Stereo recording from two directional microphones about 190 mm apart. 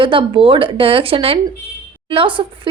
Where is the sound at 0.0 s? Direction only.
25° right (ahead or behind).